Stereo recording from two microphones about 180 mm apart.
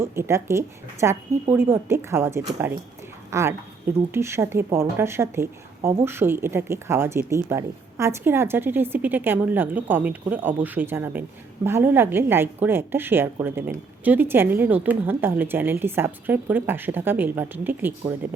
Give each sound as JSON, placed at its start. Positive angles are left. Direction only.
{"t": 0.0, "sound": "a woman's voice", "side_deg": -15}